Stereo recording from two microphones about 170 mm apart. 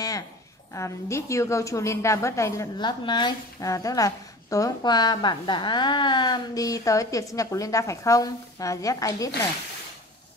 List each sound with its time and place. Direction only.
0.7 s a woman's voice: 15° left (ahead or behind)